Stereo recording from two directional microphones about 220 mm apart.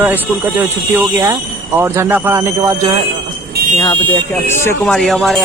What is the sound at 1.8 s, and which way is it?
Speech, 10° right (ahead or behind).